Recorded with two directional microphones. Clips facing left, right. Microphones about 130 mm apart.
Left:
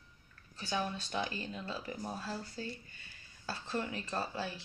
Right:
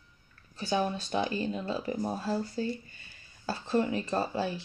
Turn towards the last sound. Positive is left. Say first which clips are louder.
# right 8 dB
turn(degrees=-20)  # may be behind; listen again after turning